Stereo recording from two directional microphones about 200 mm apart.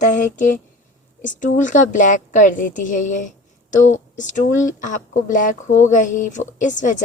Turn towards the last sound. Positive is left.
turn(degrees=40)  # may be behind; listen again after turning